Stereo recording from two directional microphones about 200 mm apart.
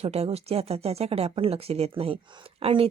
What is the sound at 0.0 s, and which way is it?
A woman's voice, 30° right (ahead or behind).